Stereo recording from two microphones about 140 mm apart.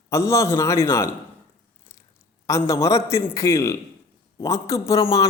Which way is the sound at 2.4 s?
20° left (ahead or behind).